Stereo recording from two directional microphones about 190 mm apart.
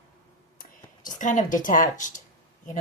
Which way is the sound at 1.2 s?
40° left (ahead or behind).